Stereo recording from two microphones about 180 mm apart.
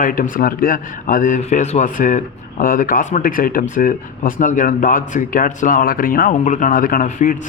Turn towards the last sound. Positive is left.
turn(degrees=50)  # may be behind; listen again after turning